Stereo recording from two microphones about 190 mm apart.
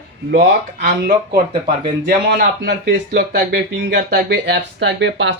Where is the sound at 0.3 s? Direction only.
60° right (ahead or behind).